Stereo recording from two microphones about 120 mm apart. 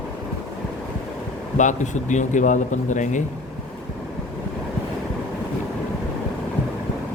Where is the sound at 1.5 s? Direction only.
90° left.